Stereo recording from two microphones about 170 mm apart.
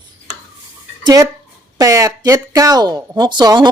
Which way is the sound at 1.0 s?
20° right (ahead or behind).